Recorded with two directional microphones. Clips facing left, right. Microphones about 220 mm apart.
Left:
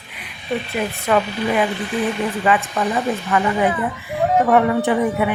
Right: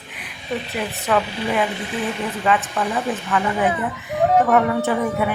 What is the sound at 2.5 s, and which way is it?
Speech, 5° left (ahead or behind).